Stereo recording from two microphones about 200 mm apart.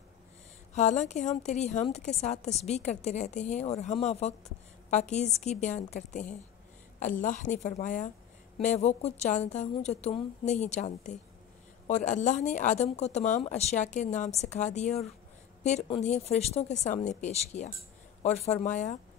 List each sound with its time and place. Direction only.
0.7 s a woman's voice: 35° left (ahead or behind)